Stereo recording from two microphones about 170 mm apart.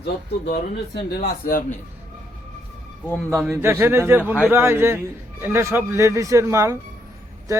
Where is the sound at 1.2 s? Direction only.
55° left (ahead or behind).